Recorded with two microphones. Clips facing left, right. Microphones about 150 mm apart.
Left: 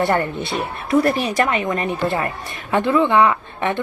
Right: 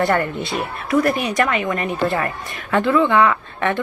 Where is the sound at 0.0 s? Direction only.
20° left (ahead or behind).